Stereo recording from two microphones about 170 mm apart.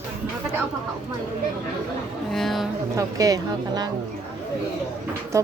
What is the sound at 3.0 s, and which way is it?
Speech, 20° right (ahead or behind).